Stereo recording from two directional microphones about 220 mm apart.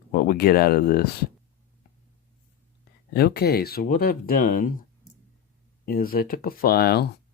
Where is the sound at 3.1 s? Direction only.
45° left (ahead or behind).